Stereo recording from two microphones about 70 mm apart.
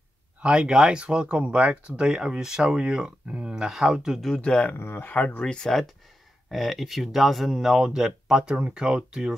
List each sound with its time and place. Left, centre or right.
0.4 s speech: centre
4.4 s speech: centre
4.7 s speech: left
5.1 s speech: left; by 9.3 s centre